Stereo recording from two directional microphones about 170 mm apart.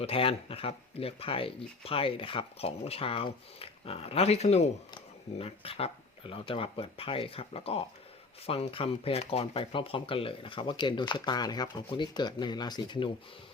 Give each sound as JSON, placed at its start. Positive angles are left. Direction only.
{"t": 0.0, "sound": "speech", "side_deg": 35}